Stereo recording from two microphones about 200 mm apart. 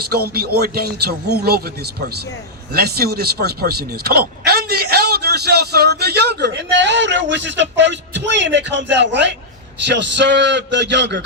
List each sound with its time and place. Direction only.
0.1 s a man's voice: 50° right (ahead or behind)